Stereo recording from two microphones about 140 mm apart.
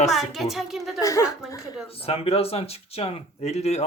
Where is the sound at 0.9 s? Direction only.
25° left (ahead or behind).